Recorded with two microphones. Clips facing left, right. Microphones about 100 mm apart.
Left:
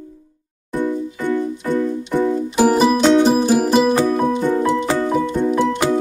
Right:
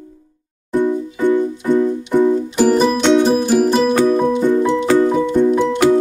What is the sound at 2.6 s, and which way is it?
Music, 10° left (ahead or behind).